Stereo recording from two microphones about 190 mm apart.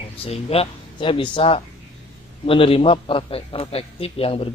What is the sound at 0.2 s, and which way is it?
A man's voice, 30° left (ahead or behind).